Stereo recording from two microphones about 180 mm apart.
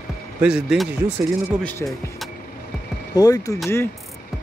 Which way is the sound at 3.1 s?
20° left (ahead or behind).